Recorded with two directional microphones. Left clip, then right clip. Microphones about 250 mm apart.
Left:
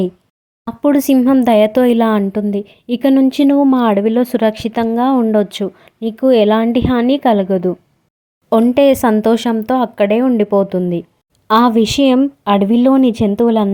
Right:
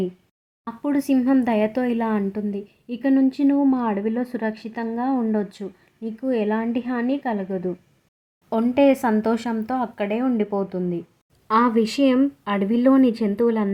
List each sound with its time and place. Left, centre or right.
0.6 s speech: left